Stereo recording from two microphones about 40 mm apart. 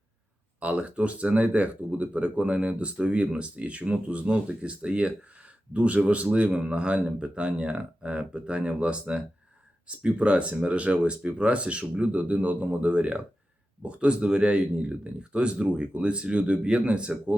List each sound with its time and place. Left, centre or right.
0.6 s speech: right